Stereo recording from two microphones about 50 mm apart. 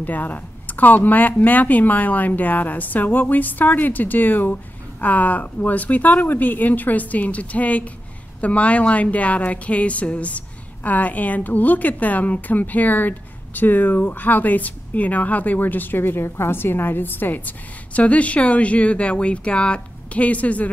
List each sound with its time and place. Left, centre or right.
0.0 s a woman's voice: left